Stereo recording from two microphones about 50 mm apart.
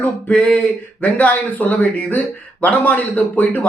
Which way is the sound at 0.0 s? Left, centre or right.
Left.